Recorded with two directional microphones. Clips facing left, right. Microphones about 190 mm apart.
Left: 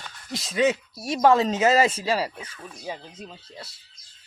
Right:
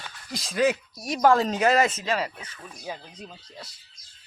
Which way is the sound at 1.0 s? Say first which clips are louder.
Left 2 dB; 25° left (ahead or behind).